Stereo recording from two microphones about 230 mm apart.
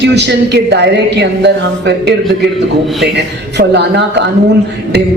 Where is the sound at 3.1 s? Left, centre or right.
Right.